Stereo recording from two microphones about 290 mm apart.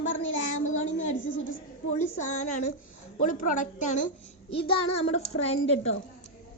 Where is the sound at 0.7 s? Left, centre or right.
Left.